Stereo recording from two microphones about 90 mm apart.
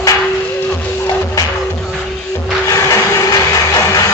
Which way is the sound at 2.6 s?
35° left (ahead or behind).